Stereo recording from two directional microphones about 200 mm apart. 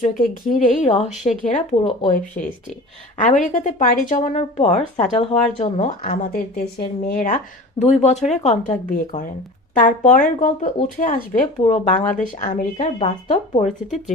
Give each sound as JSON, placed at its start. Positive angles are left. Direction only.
{"t": 0.0, "sound": "a woman's voice", "side_deg": 40}
{"t": 7.8, "sound": "a woman's voice", "side_deg": 35}
{"t": 13.8, "sound": "speech", "side_deg": 0}